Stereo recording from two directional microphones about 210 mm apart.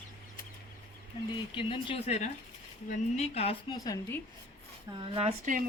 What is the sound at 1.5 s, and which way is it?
A woman's voice, 25° left (ahead or behind).